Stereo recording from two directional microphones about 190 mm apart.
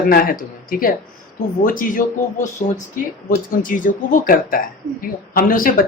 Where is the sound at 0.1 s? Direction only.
50° left (ahead or behind).